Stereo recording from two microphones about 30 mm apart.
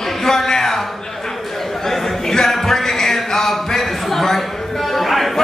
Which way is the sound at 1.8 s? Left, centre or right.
Centre.